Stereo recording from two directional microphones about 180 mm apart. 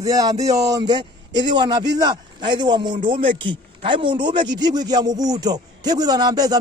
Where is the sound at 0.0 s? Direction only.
20° right (ahead or behind).